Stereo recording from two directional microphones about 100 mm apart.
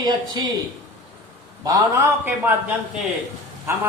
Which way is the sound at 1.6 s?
35° right (ahead or behind).